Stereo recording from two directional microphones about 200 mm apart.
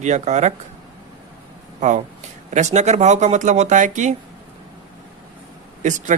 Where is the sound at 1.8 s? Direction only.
35° right (ahead or behind).